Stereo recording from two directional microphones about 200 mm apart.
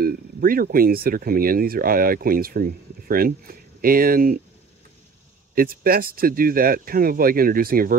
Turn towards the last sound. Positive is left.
turn(degrees=-45)  # may be behind; listen again after turning